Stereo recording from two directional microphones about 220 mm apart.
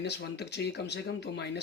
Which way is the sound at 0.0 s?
50° left (ahead or behind).